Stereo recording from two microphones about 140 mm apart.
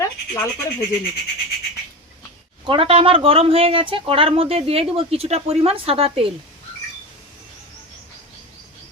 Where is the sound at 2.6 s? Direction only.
40° right (ahead or behind).